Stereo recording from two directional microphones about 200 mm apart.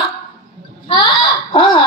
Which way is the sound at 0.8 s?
25° left (ahead or behind).